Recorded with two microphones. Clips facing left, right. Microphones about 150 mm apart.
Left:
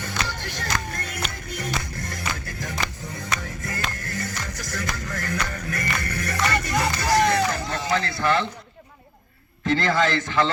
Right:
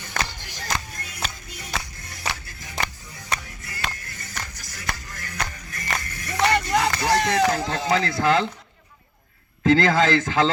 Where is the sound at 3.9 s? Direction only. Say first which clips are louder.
Left 6 dB; 50° left (ahead or behind).